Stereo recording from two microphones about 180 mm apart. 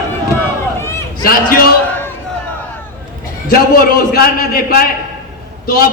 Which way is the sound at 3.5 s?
55° left (ahead or behind).